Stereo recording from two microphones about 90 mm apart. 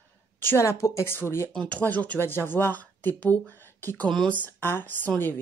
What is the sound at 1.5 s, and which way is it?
Speech, 10° left (ahead or behind).